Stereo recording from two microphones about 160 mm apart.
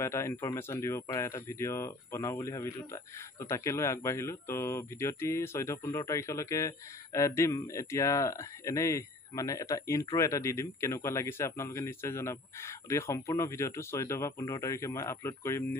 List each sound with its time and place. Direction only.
0.0 s speech: 15° left (ahead or behind)